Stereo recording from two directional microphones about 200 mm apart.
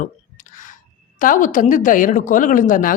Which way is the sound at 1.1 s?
40° left (ahead or behind).